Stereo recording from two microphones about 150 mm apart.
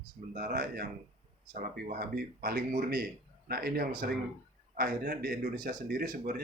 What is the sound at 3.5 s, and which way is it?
Speech, 90° right.